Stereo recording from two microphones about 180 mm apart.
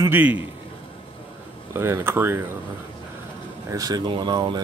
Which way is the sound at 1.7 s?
15° right (ahead or behind).